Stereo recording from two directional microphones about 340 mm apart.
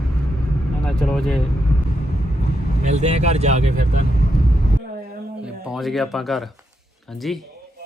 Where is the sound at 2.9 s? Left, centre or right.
Centre.